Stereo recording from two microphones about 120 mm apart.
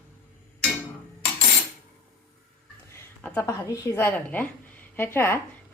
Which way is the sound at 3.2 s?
20° left (ahead or behind).